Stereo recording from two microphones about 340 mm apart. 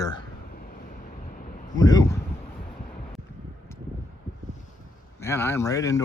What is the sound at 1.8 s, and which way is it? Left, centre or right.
Speech, centre.